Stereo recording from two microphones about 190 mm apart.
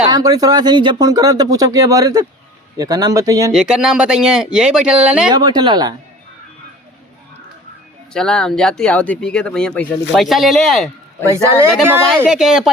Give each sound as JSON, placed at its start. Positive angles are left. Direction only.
{"t": 0.1, "sound": "speech", "side_deg": -20}
{"t": 3.5, "sound": "speech", "side_deg": -5}
{"t": 5.3, "sound": "speech", "side_deg": -20}
{"t": 8.1, "sound": "a man's voice", "side_deg": 5}
{"t": 11.9, "sound": "speech", "side_deg": -5}